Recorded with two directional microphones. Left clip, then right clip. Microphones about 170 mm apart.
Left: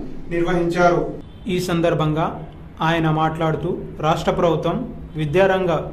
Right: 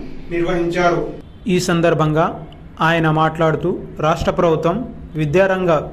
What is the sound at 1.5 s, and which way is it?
A man's voice, 25° right (ahead or behind).